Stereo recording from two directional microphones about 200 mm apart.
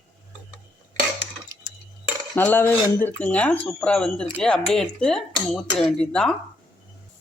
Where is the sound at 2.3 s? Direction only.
10° left (ahead or behind).